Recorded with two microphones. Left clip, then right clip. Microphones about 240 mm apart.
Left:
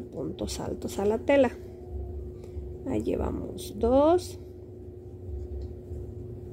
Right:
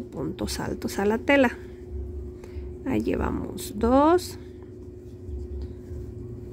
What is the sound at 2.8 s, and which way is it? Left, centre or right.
A woman's voice, centre.